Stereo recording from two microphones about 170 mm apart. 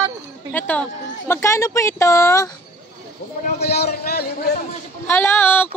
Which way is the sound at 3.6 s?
70° left (ahead or behind).